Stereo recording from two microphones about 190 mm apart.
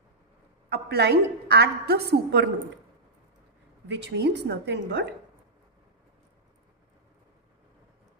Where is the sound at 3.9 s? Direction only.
65° right (ahead or behind).